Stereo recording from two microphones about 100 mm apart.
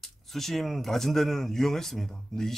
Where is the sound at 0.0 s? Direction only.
5° left (ahead or behind).